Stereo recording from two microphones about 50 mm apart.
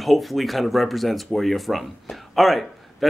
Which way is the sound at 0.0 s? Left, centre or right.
Centre.